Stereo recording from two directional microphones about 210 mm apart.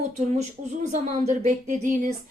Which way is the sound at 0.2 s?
35° right (ahead or behind).